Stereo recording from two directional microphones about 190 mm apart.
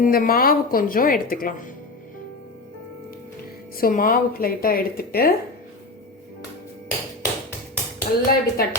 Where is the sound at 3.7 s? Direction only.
50° left (ahead or behind).